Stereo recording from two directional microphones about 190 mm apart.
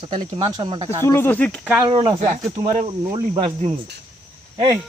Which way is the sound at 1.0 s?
15° left (ahead or behind).